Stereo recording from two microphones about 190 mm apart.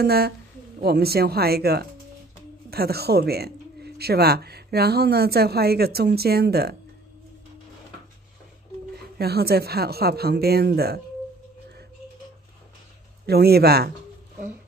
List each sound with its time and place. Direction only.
0.0 s speech: 55° right (ahead or behind)
8.9 s speech: 55° right (ahead or behind)
13.3 s speech: 55° right (ahead or behind)